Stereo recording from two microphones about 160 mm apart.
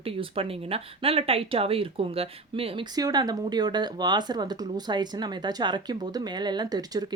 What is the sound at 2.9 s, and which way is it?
Speech, 25° right (ahead or behind).